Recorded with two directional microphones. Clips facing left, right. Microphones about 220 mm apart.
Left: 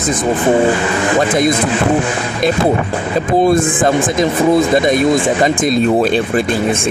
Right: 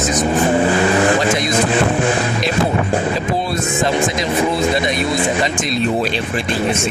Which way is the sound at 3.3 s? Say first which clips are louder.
Left 8 dB; 50° left (ahead or behind).